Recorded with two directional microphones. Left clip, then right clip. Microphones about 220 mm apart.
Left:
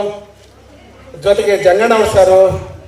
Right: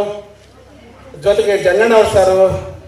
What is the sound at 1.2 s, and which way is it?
A man's voice, 50° left (ahead or behind).